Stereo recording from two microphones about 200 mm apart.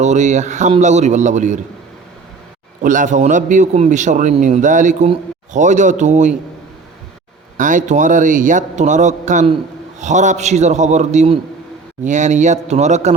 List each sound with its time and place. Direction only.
0.0 s a man's voice: 35° right (ahead or behind)
2.8 s a man's voice: 40° right (ahead or behind)
7.5 s a man's voice: 40° right (ahead or behind)